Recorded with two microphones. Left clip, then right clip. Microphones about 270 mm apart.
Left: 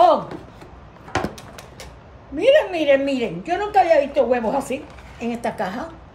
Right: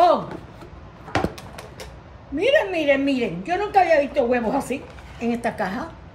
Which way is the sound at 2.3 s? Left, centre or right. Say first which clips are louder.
Left 3 dB; centre.